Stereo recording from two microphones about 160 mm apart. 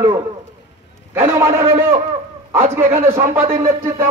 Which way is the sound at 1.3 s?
20° right (ahead or behind).